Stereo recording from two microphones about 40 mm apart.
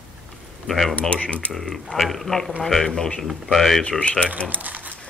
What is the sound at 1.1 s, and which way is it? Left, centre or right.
Speech, left.